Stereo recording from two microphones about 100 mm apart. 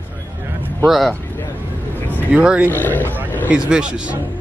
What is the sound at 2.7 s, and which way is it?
Speech, 20° left (ahead or behind).